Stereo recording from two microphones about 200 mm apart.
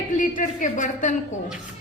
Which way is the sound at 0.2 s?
40° left (ahead or behind).